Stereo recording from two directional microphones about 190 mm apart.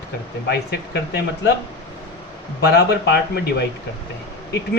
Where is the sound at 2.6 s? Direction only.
60° left (ahead or behind).